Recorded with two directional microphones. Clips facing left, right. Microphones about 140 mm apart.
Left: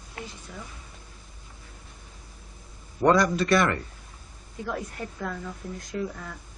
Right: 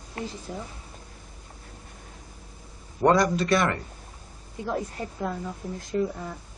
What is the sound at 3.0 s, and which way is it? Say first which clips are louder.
A woman's voice: even; 25° right (ahead or behind).